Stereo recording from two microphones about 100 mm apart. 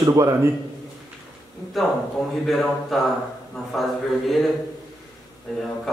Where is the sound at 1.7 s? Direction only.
Centre (ahead or behind).